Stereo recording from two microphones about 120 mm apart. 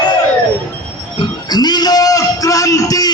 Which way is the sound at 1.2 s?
35° left (ahead or behind).